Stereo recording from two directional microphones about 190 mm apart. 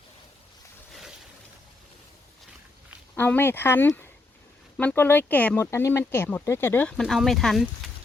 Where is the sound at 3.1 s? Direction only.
10° left (ahead or behind).